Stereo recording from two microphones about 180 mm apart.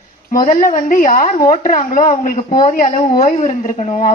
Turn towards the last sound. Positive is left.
turn(degrees=35)  # may be behind; listen again after turning